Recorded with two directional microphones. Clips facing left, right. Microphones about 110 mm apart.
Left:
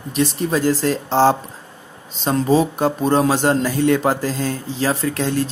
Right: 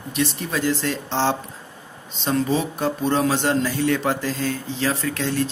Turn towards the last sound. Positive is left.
turn(degrees=40)  # may be behind; listen again after turning